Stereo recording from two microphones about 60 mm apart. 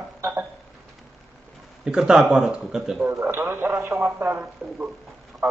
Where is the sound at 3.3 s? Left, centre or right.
Right.